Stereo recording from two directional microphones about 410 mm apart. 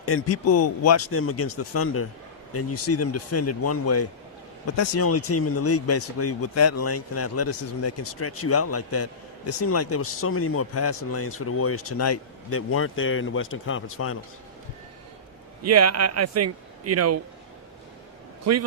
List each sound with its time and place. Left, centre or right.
0.0 s speech: left
15.6 s a man's voice: right
18.5 s a man's voice: right